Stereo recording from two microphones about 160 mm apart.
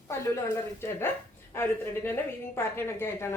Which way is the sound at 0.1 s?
15° left (ahead or behind).